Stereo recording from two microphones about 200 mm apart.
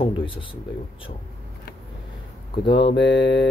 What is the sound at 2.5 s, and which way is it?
Speech, 25° left (ahead or behind).